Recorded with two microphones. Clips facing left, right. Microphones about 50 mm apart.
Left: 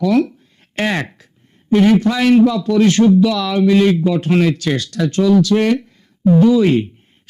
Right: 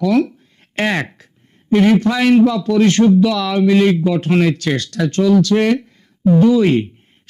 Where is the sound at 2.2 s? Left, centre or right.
Right.